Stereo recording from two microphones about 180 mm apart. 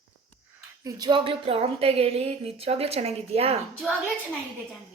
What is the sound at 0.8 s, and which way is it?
A woman's voice, 20° right (ahead or behind).